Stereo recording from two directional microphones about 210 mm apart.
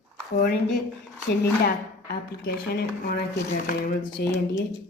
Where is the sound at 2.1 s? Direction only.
50° left (ahead or behind).